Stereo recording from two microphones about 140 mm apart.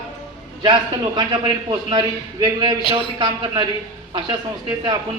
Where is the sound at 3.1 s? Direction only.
35° right (ahead or behind).